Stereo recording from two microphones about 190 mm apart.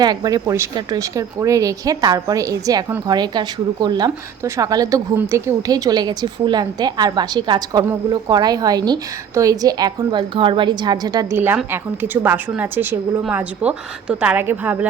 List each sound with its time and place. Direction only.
0.0 s a woman's voice: 20° right (ahead or behind)